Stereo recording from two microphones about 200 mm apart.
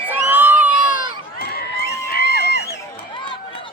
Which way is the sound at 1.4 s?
50° left (ahead or behind).